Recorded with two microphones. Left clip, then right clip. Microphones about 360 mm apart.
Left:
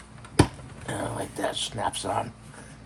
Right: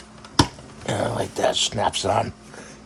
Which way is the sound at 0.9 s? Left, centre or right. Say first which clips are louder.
Right 8 dB; right.